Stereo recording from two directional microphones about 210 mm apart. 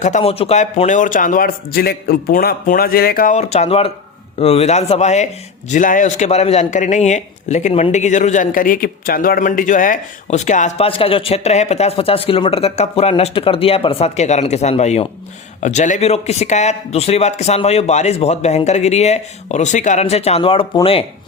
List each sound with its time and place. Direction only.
0.0 s speech: 30° left (ahead or behind)